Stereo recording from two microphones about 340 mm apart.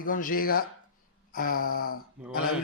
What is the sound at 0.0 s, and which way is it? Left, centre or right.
Speech, left.